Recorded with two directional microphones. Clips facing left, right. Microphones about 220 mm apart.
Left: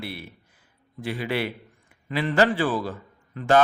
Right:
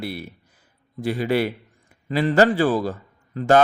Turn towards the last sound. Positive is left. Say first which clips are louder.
# right 3 dB
turn(degrees=-40)  # may be behind; listen again after turning